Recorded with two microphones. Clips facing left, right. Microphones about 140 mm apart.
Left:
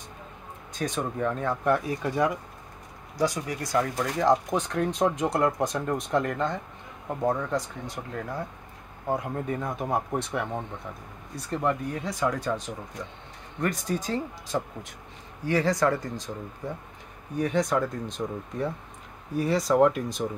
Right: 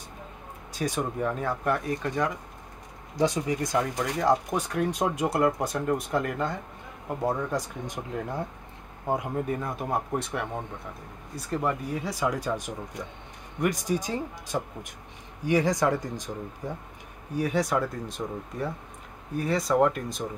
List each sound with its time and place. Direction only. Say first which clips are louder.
0.7 s speech: even; 10° right (ahead or behind); by 2.3 s 10° left (ahead or behind)
3.2 s speech: right 2 dB; 20° right (ahead or behind)
4.2 s a man's voice: left 2 dB; 5° right (ahead or behind)
9.3 s speech: right 1 dB; centre (ahead or behind)